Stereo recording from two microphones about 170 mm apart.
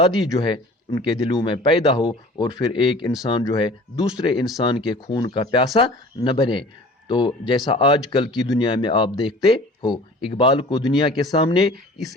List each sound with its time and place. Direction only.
0.0 s speech: 25° left (ahead or behind)